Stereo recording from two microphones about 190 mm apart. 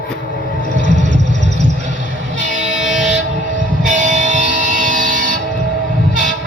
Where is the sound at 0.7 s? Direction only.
40° right (ahead or behind).